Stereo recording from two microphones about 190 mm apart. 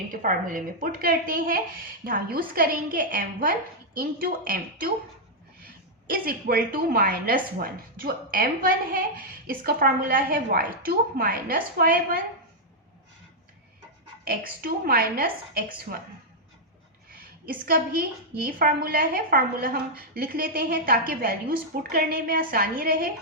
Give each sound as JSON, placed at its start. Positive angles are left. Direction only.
{"t": 0.1, "sound": "a woman's voice", "side_deg": -45}
{"t": 14.3, "sound": "a woman's voice", "side_deg": -50}
{"t": 18.4, "sound": "a woman's voice", "side_deg": -50}